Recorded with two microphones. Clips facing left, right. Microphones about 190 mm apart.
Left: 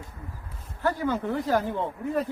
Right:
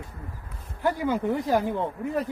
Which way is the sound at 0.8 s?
15° right (ahead or behind).